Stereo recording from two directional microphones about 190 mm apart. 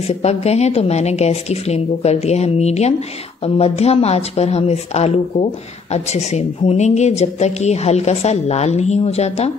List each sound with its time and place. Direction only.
0.0 s a woman's voice: 35° left (ahead or behind)